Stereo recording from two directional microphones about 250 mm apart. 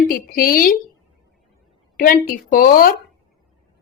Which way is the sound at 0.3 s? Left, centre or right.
Left.